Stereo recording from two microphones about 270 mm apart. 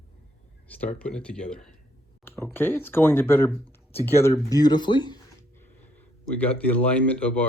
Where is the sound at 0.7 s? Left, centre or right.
Centre.